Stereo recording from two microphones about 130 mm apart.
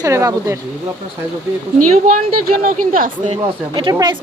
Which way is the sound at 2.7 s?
90° right.